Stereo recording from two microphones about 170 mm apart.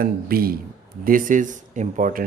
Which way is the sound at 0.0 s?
60° right (ahead or behind).